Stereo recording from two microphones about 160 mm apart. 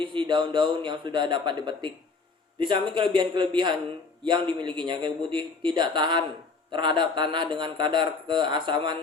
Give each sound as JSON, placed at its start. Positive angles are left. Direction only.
{"t": 0.0, "sound": "speech", "side_deg": -30}